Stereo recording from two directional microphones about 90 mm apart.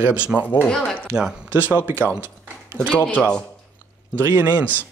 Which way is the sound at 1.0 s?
10° right (ahead or behind).